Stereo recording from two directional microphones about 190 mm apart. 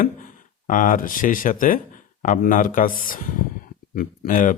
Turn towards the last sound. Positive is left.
turn(degrees=45)  # may be behind; listen again after turning